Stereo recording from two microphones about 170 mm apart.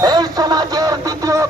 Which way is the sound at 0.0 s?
25° right (ahead or behind).